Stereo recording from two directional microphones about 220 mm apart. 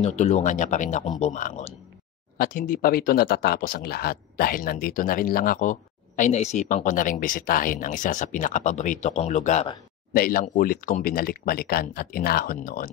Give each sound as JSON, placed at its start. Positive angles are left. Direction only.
{"t": 0.0, "sound": "speech", "side_deg": 30}